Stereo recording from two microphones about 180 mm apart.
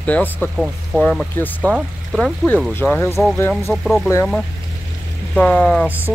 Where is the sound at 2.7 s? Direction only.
10° left (ahead or behind).